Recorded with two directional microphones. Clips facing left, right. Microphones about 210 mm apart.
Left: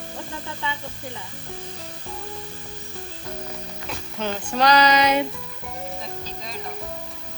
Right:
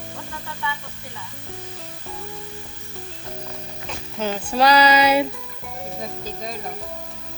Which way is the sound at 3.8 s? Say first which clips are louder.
Right 2 dB; 5° right (ahead or behind).